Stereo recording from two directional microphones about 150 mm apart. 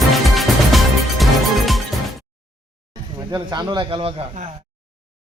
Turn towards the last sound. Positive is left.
turn(degrees=-35)  # may be behind; listen again after turning